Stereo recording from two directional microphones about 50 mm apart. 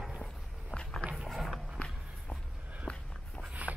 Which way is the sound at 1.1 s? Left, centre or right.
Centre.